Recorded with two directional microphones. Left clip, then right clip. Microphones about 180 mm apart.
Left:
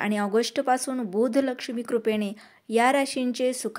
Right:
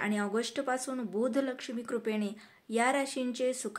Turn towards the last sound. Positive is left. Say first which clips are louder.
# left 6 dB
turn(degrees=40)  # may be behind; listen again after turning